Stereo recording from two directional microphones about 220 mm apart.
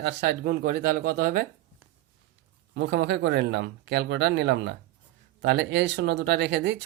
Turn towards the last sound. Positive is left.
turn(degrees=-50)  # may be behind; listen again after turning